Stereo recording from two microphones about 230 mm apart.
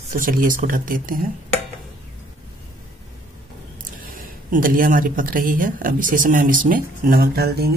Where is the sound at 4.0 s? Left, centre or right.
Right.